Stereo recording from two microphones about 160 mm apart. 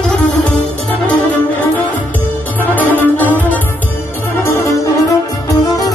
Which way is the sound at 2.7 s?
10° left (ahead or behind).